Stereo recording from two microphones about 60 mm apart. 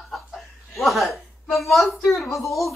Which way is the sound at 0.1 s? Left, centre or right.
Centre.